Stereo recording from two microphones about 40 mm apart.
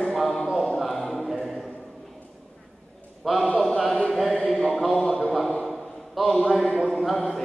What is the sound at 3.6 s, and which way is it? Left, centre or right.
Chant, centre.